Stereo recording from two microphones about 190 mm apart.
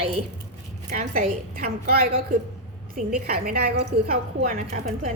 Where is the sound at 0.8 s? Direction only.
45° right (ahead or behind).